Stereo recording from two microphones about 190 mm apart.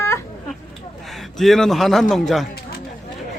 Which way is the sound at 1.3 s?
Centre (ahead or behind).